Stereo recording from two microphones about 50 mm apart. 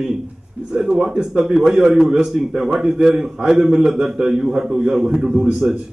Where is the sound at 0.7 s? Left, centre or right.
Centre.